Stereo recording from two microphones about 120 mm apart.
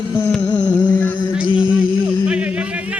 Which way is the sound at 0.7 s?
15° left (ahead or behind).